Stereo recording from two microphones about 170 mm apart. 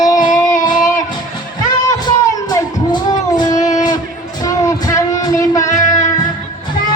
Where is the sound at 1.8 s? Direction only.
20° left (ahead or behind).